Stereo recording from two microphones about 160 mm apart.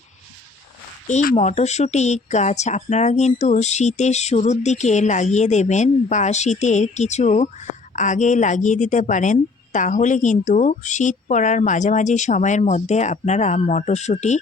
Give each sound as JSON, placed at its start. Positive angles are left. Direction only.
{"t": 1.0, "sound": "a woman's voice", "side_deg": 45}